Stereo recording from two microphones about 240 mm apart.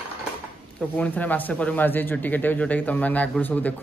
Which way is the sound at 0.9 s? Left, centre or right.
Centre.